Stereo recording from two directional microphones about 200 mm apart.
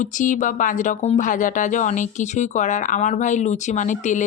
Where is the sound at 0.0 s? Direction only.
40° left (ahead or behind).